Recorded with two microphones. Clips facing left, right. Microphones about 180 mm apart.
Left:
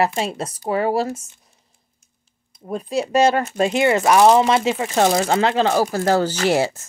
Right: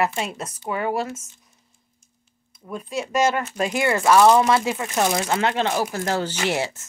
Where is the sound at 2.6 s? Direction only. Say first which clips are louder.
Left 6 dB; 35° left (ahead or behind).